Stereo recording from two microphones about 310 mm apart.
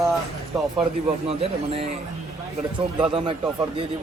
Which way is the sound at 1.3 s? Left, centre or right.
Centre.